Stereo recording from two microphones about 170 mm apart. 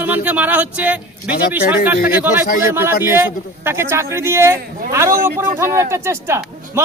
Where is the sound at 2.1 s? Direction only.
10° right (ahead or behind).